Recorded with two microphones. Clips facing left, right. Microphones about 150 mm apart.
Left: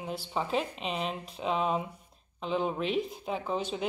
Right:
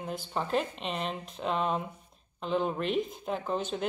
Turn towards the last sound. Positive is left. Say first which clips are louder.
# even
turn(degrees=0)  # may be behind; listen again after turning